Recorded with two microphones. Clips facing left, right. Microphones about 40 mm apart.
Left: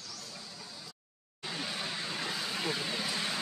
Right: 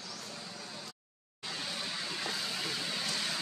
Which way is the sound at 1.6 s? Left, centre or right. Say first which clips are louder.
Left 2 dB; centre.